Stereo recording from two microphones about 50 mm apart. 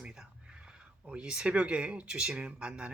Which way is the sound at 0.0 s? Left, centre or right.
Centre.